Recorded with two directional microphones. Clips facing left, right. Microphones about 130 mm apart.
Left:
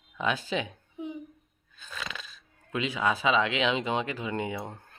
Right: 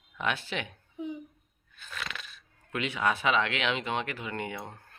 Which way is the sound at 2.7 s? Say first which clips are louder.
Left 1 dB; 15° left (ahead or behind).